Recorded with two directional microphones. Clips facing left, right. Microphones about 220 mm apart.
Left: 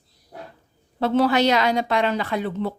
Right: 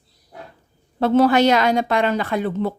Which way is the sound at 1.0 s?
50° right (ahead or behind).